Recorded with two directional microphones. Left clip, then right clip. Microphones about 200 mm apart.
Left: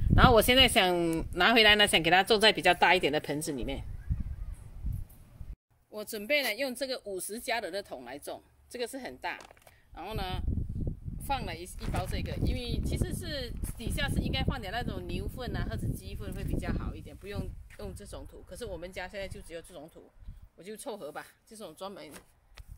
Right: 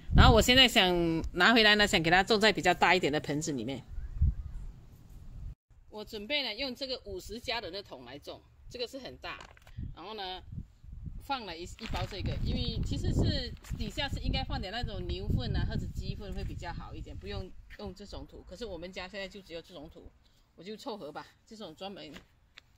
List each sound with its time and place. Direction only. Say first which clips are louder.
0.1 s speech: left 1 dB; centre (ahead or behind)
5.9 s speech: left 5 dB; 20° left (ahead or behind)
11.2 s speech: left 2 dB; 5° right (ahead or behind)